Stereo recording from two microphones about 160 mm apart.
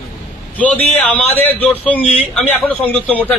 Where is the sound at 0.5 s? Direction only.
10° left (ahead or behind).